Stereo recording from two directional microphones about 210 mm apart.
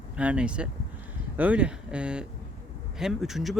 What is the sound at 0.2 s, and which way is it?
Speech, 5° right (ahead or behind).